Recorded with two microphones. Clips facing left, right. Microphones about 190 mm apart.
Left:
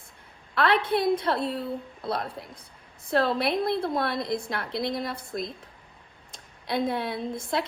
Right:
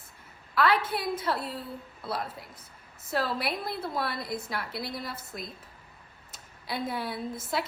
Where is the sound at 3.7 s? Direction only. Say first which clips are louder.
Left 6 dB; 25° left (ahead or behind).